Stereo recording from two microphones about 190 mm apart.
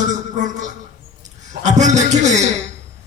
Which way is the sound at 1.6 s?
40° right (ahead or behind).